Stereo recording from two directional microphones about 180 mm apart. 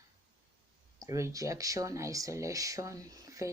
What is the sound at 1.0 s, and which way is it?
Speech, 15° right (ahead or behind).